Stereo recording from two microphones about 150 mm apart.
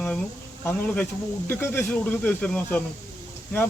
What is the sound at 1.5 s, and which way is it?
Speech, 15° left (ahead or behind).